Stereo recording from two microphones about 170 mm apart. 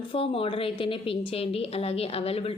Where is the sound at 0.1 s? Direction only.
30° left (ahead or behind).